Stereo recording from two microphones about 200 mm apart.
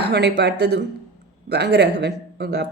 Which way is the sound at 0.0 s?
55° right (ahead or behind).